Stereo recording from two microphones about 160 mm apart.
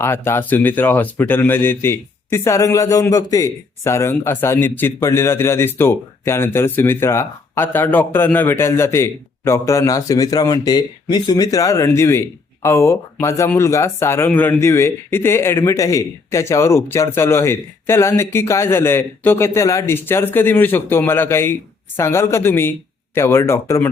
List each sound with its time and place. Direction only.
0.0 s speech: 15° left (ahead or behind)